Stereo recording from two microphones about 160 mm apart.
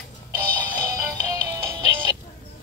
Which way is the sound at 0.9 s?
20° right (ahead or behind).